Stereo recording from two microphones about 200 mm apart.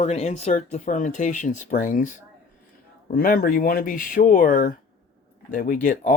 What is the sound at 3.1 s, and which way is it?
Speech, 45° left (ahead or behind).